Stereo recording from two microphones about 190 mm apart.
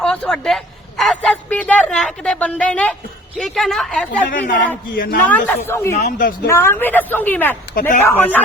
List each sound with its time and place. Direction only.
0.0 s a man's voice: 5° left (ahead or behind)
4.3 s speech: 45° left (ahead or behind)
5.5 s a woman's voice: 15° left (ahead or behind)
5.9 s speech: 50° left (ahead or behind)
6.5 s a woman's voice: 15° left (ahead or behind)
7.8 s speech: 45° left (ahead or behind)
8.0 s a woman's voice: 10° left (ahead or behind)